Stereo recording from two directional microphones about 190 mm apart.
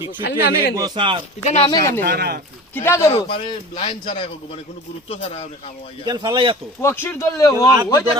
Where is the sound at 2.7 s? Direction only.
15° left (ahead or behind).